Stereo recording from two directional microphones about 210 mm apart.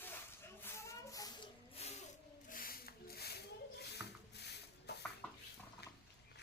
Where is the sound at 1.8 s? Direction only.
30° left (ahead or behind).